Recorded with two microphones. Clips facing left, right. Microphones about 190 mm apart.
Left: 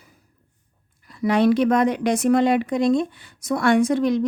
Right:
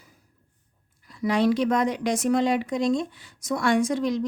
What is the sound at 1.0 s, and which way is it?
Speech, 60° left (ahead or behind).